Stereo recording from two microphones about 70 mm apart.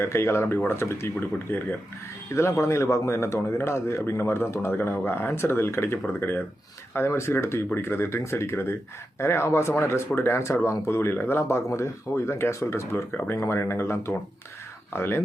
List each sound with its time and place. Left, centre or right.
0.0 s a man's voice: left
13.1 s speech: left
13.3 s a man's voice: left